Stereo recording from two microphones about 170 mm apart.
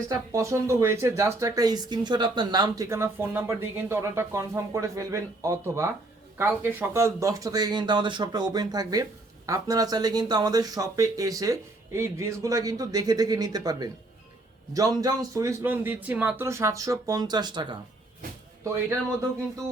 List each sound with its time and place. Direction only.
0.1 s a man's voice: 20° right (ahead or behind)